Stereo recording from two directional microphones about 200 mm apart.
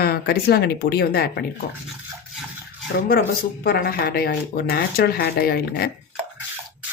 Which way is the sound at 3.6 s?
50° left (ahead or behind).